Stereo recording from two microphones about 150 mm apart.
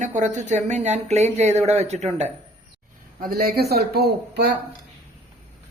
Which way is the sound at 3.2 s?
85° right.